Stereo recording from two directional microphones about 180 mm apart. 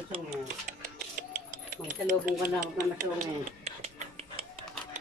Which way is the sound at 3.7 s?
35° right (ahead or behind).